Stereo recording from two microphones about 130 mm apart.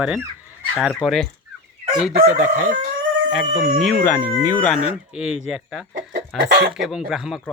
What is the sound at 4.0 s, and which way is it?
Speech, 15° left (ahead or behind).